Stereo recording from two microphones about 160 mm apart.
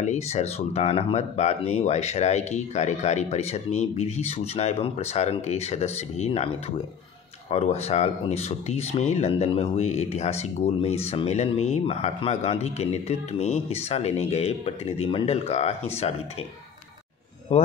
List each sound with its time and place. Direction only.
0.0 s speech: 45° left (ahead or behind)
7.5 s speech: 40° left (ahead or behind)
17.5 s speech: 40° left (ahead or behind)